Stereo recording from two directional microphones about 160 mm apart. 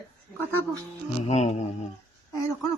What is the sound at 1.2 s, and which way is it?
Speech, 45° left (ahead or behind).